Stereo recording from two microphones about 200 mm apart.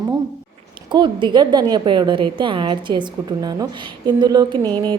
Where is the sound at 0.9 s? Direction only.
25° right (ahead or behind).